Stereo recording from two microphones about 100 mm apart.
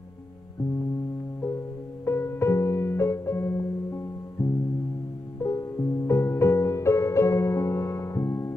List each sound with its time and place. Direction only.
2.0 s music: 25° left (ahead or behind)